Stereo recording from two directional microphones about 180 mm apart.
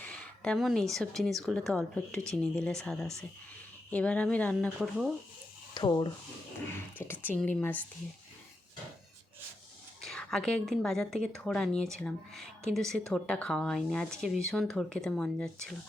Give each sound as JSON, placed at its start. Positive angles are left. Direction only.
{"t": 0.4, "sound": "a woman's voice", "side_deg": 0}
{"t": 5.7, "sound": "speech", "side_deg": 25}
{"t": 7.0, "sound": "speech", "side_deg": 10}
{"t": 10.0, "sound": "a woman's voice", "side_deg": 0}